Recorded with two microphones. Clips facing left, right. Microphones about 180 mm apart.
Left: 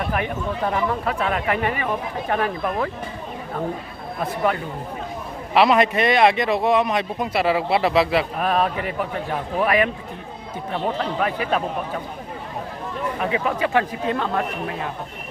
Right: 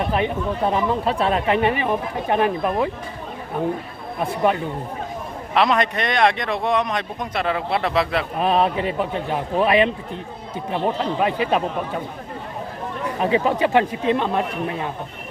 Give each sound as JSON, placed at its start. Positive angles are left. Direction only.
{"t": 0.0, "sound": "speech", "side_deg": -20}
{"t": 5.5, "sound": "speech", "side_deg": 5}
{"t": 8.4, "sound": "speech", "side_deg": -25}
{"t": 13.2, "sound": "speech", "side_deg": -30}